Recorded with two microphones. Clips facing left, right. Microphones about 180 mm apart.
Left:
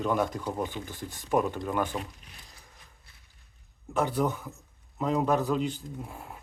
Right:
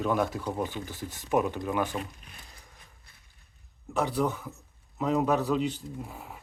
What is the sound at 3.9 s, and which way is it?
Speech, centre (ahead or behind).